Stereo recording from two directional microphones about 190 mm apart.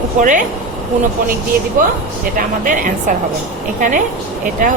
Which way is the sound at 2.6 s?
45° right (ahead or behind).